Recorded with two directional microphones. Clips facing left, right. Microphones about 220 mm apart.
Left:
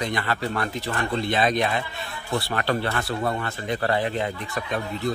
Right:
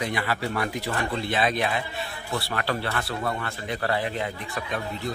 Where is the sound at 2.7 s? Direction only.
20° left (ahead or behind).